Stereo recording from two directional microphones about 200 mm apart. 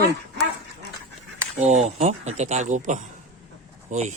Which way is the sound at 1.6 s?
35° right (ahead or behind).